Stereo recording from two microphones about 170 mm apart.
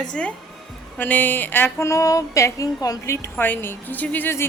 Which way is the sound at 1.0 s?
10° left (ahead or behind).